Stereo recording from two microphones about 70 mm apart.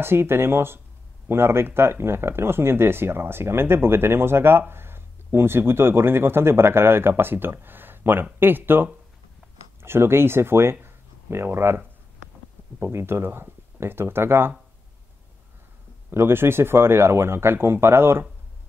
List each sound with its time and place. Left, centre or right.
0.0 s speech: right
16.1 s speech: right